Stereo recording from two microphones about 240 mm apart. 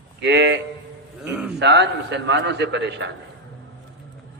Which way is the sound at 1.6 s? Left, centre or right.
Right.